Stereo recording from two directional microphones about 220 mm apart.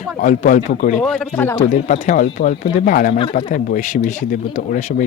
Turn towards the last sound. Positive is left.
turn(degrees=35)  # may be behind; listen again after turning